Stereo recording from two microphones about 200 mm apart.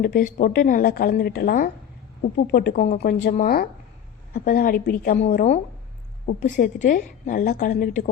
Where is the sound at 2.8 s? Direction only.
40° left (ahead or behind).